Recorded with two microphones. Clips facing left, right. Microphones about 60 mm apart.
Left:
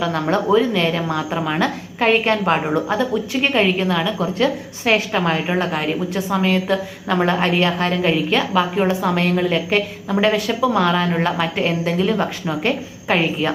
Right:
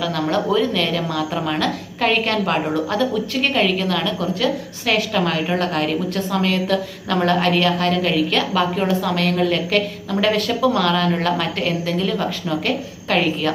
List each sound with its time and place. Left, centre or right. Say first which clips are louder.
0.0 s a woman's voice: left 1 dB; left
1.3 s a woman's voice: left 1 dB; centre
1.5 s a woman's voice: left 2 dB; left